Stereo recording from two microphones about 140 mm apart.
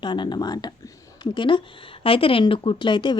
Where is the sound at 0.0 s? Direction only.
30° left (ahead or behind).